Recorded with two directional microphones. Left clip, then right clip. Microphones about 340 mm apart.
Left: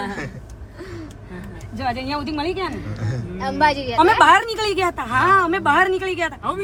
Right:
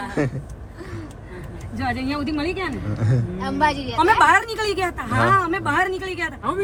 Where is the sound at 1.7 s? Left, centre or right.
Centre.